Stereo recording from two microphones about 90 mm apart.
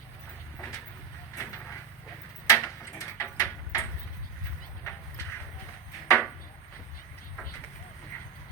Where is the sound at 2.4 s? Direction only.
35° left (ahead or behind).